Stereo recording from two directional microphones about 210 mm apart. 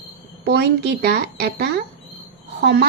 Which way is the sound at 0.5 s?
50° right (ahead or behind).